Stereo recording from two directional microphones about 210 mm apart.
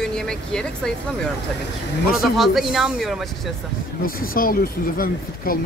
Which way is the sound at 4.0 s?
45° left (ahead or behind).